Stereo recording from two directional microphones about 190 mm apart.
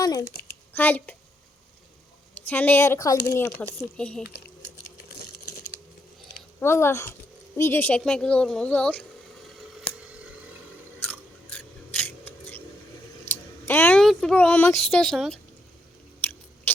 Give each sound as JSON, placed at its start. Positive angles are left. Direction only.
{"t": 0.0, "sound": "a woman's voice", "side_deg": 20}
{"t": 2.3, "sound": "speech", "side_deg": 10}
{"t": 6.6, "sound": "speech", "side_deg": 15}
{"t": 9.6, "sound": "scissors", "side_deg": 0}
{"t": 11.1, "sound": "scissors", "side_deg": 10}
{"t": 13.7, "sound": "a sound", "side_deg": 10}
{"t": 14.0, "sound": "speech", "side_deg": 0}
{"t": 16.7, "sound": "rodents", "side_deg": 10}